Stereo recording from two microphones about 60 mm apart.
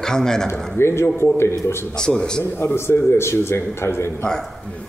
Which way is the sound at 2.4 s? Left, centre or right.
Left.